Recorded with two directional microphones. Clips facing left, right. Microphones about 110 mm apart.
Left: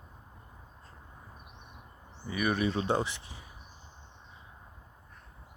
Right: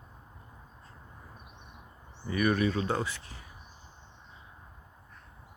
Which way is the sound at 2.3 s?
15° left (ahead or behind).